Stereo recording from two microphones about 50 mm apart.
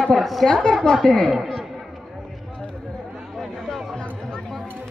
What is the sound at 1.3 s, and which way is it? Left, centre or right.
Speech, centre.